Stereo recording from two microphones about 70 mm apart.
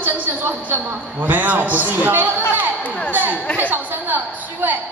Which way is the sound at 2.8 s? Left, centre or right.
Left.